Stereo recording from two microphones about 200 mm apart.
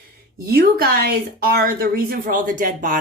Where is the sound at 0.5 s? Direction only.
50° right (ahead or behind).